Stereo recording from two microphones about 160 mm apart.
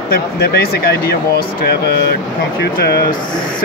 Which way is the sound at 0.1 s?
85° left.